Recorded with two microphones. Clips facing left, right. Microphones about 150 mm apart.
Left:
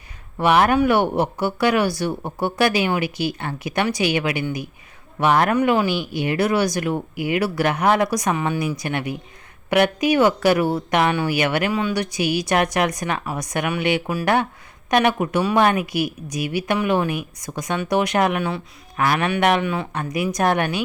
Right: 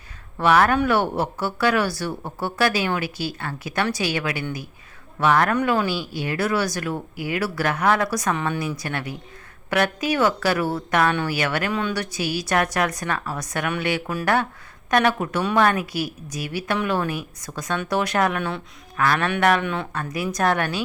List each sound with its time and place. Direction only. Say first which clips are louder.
0.3 s speech: left 2 dB; 20° left (ahead or behind)
18.3 s speech: left 3 dB; 5° left (ahead or behind)
19.6 s speech: left 2 dB; 5° left (ahead or behind)
19.9 s speech: left 3 dB; 15° left (ahead or behind)